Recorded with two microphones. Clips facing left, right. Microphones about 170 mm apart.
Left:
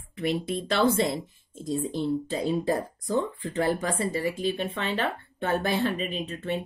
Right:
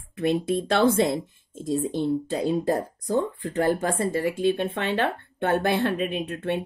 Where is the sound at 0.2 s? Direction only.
55° right (ahead or behind).